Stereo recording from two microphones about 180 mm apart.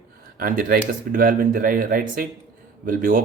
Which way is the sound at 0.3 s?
55° right (ahead or behind).